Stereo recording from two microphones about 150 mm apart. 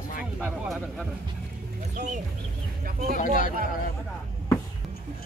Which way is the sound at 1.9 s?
55° right (ahead or behind).